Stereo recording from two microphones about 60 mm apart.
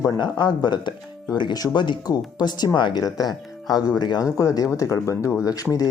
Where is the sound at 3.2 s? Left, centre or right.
Left.